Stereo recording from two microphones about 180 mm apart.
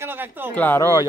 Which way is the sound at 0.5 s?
10° left (ahead or behind).